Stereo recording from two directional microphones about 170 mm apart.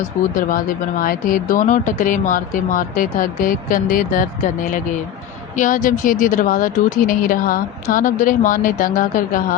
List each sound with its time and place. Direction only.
0.3 s a woman's voice: 55° left (ahead or behind)
5.5 s a woman's voice: 50° left (ahead or behind)